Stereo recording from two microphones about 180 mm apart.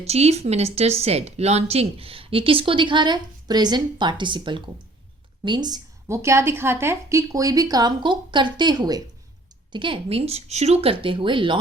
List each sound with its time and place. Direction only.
0.0 s a woman's voice: 35° right (ahead or behind)